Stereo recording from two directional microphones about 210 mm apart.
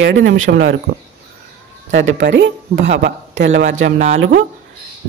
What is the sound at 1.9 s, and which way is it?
Speech, 60° right (ahead or behind).